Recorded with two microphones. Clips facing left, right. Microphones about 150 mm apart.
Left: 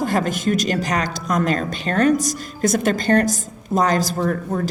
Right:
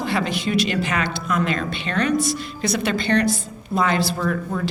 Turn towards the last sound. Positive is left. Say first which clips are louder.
# left 2 dB
turn(degrees=40)  # may be behind; listen again after turning